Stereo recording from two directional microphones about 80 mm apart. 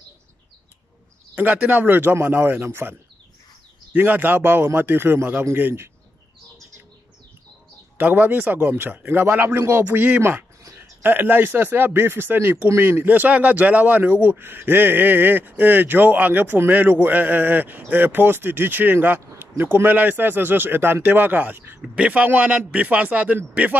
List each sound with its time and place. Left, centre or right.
1.3 s speech: right
8.0 s speech: right
21.8 s speech: centre